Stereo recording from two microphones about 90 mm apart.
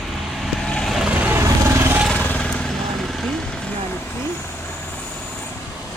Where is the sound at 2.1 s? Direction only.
15° left (ahead or behind).